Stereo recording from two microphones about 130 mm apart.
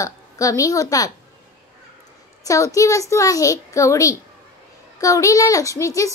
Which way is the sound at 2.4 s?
25° left (ahead or behind).